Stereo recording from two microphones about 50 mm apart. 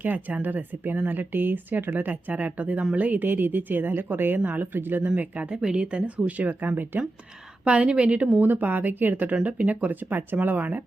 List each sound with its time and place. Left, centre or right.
0.0 s speech: right
5.1 s speech: right
7.6 s speech: right
8.4 s speech: right
9.3 s speech: right